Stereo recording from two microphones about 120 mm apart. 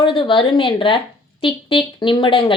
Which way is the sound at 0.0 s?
45° left (ahead or behind).